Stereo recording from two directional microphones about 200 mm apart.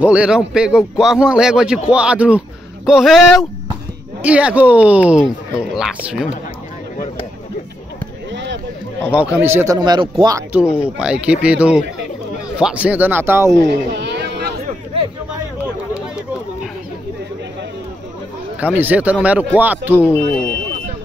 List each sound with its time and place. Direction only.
0.0 s a man's voice: 5° right (ahead or behind)
8.3 s a sound: 60° right (ahead or behind)
9.1 s speech: 5° right (ahead or behind)
10.5 s a man's voice: 5° right (ahead or behind)
13.7 s a sound: 60° right (ahead or behind)
18.6 s speech: 10° right (ahead or behind)
20.0 s speech: 10° left (ahead or behind)